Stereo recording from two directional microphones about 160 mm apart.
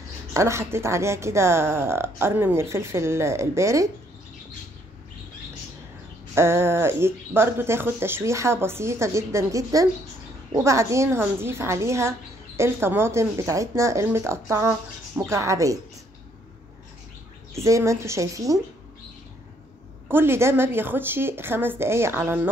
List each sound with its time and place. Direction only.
0.3 s a woman's voice: 20° right (ahead or behind)
6.3 s a woman's voice: 15° right (ahead or behind)
17.6 s a woman's voice: 20° right (ahead or behind)
20.1 s a woman's voice: 15° right (ahead or behind)